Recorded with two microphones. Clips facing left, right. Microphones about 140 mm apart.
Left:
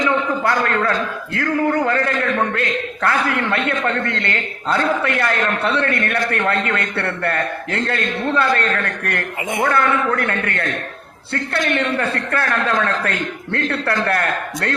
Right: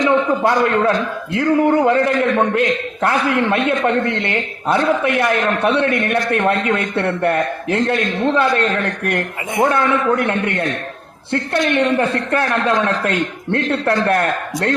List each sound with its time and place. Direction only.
0.0 s a man's voice: 20° right (ahead or behind)